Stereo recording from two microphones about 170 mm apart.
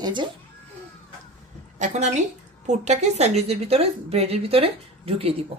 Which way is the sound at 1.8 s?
45° right (ahead or behind).